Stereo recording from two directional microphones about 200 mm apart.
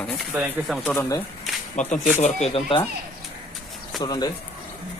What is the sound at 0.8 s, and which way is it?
Speech, 10° left (ahead or behind).